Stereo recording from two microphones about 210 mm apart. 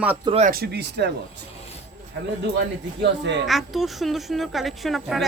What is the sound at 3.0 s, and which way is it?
Speech, 55° right (ahead or behind).